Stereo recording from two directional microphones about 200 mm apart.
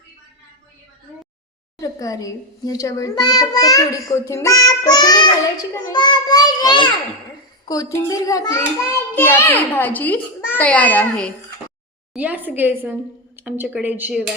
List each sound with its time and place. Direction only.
1.8 s a child's voice: 15° left (ahead or behind)
12.1 s a woman's voice: 5° right (ahead or behind)